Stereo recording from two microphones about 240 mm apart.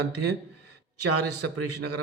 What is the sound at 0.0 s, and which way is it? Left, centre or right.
Speech, right.